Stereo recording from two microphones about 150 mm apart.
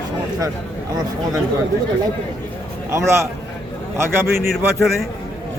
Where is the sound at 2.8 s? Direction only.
20° right (ahead or behind).